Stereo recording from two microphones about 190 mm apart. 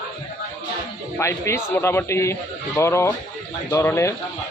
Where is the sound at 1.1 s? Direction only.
15° left (ahead or behind).